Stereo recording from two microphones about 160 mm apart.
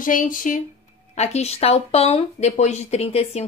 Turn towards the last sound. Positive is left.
turn(degrees=40)  # may be behind; listen again after turning